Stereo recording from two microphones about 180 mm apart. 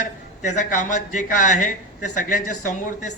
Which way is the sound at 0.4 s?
40° left (ahead or behind).